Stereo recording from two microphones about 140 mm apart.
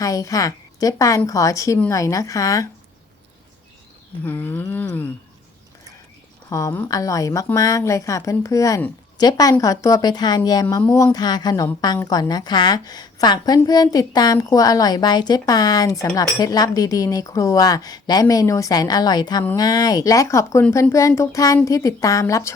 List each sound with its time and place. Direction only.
0.0 s a woman's voice: 25° left (ahead or behind)
4.2 s a sound: 15° left (ahead or behind)
6.5 s a woman's voice: 20° left (ahead or behind)